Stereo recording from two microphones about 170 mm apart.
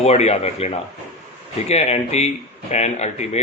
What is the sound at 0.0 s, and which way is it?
Speech, 40° left (ahead or behind).